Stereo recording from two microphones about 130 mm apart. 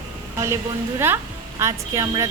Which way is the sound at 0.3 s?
20° right (ahead or behind).